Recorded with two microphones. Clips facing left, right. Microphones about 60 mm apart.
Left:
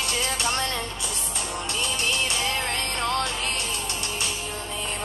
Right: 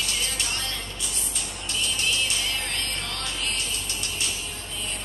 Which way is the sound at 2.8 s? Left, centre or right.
Left.